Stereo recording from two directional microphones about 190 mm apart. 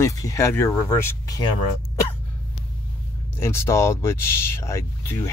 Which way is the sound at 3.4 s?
15° left (ahead or behind).